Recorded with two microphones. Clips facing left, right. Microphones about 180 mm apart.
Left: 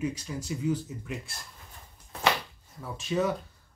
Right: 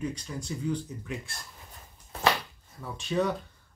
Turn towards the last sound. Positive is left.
turn(degrees=0)  # may be behind; listen again after turning